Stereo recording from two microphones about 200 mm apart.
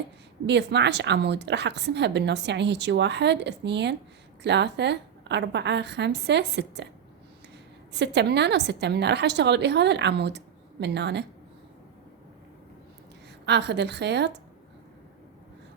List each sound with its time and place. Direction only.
0.4 s a woman's voice: 60° right (ahead or behind)
7.9 s a woman's voice: 60° right (ahead or behind)
13.4 s a woman's voice: 60° right (ahead or behind)